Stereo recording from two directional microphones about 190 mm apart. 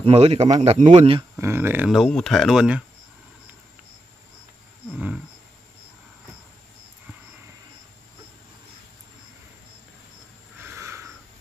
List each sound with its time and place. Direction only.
0.0 s speech: 35° right (ahead or behind)
1.3 s speech: 10° right (ahead or behind)
4.9 s wild animals: 5° right (ahead or behind)
10.6 s a sound: 15° right (ahead or behind)